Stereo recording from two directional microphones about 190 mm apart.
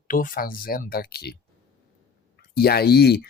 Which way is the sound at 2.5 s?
55° left (ahead or behind).